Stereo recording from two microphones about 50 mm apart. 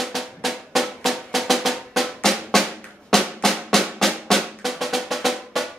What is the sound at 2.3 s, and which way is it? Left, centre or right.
Drum, centre.